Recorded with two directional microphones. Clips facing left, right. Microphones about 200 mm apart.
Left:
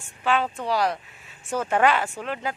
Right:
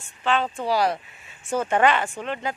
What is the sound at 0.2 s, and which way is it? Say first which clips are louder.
Speech: even; 5° left (ahead or behind).